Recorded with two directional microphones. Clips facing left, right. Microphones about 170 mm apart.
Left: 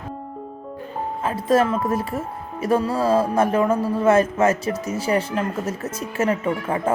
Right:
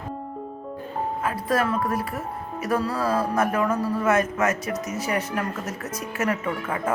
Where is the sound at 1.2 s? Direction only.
25° left (ahead or behind).